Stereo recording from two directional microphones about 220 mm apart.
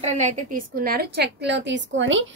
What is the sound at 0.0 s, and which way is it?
A woman's voice, 35° right (ahead or behind).